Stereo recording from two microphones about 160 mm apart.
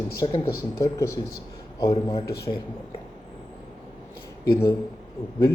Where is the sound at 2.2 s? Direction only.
90° left.